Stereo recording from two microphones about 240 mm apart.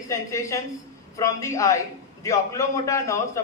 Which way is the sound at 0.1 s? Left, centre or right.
Centre.